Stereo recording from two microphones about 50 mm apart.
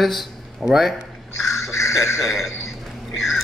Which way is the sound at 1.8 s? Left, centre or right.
Left.